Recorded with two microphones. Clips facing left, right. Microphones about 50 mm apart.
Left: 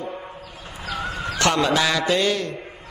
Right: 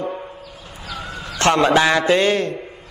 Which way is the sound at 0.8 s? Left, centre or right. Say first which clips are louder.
Left 3 dB; left.